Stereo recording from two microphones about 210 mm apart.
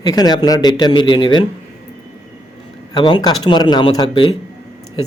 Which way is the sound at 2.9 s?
20° left (ahead or behind).